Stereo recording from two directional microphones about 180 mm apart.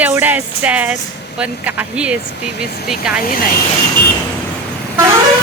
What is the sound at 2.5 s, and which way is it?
Speech, 60° left (ahead or behind).